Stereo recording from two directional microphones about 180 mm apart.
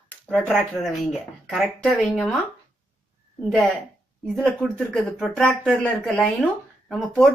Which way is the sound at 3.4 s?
Centre (ahead or behind).